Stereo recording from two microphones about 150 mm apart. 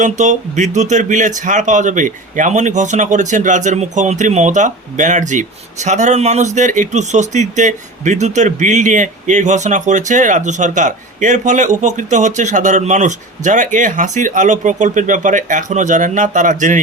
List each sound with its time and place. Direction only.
0.0 s speech: 55° right (ahead or behind)